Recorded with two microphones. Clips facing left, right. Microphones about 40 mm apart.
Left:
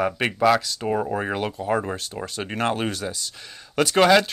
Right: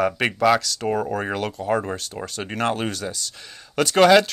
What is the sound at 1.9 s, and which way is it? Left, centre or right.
Speech, left.